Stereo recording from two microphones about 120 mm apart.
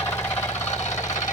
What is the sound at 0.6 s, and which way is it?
Engine knocking, 70° left (ahead or behind).